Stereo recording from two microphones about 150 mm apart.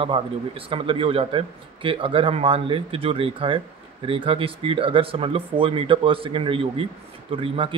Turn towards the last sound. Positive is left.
turn(degrees=-35)  # may be behind; listen again after turning